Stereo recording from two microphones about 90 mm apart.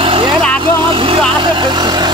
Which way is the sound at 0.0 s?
90° right.